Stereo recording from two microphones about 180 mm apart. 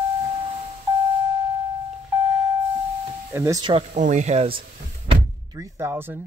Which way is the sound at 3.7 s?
40° right (ahead or behind).